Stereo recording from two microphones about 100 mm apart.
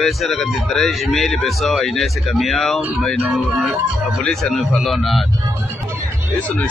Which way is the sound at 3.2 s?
20° right (ahead or behind).